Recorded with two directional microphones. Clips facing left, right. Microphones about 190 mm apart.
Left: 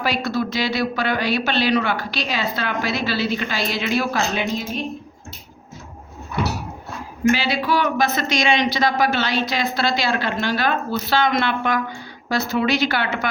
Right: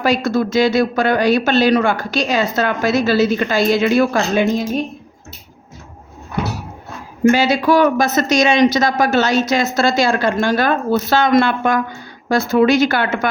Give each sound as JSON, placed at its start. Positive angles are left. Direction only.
{"t": 0.0, "sound": "speech", "side_deg": -45}
{"t": 7.3, "sound": "speech", "side_deg": -45}